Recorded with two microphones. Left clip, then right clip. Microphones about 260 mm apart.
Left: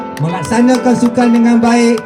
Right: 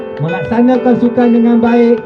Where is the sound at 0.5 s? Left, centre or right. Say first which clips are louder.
Even; left.